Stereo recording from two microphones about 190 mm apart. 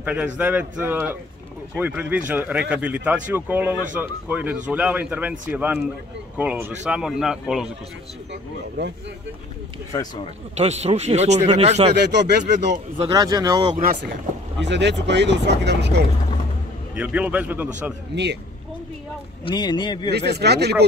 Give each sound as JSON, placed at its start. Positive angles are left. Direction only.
{"t": 0.0, "sound": "a man's voice", "side_deg": -5}
{"t": 8.3, "sound": "speech", "side_deg": -65}
{"t": 10.5, "sound": "speech", "side_deg": -35}
{"t": 11.9, "sound": "speech", "side_deg": -65}
{"t": 13.1, "sound": "speech", "side_deg": -20}
{"t": 13.7, "sound": "speech", "side_deg": -50}
{"t": 14.6, "sound": "speech", "side_deg": -65}
{"t": 16.9, "sound": "speech", "side_deg": -5}
{"t": 18.1, "sound": "speech", "side_deg": -65}
{"t": 19.4, "sound": "speech", "side_deg": 25}
{"t": 20.1, "sound": "speech", "side_deg": -60}